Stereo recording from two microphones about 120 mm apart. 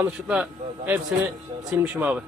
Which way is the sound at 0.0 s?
10° right (ahead or behind).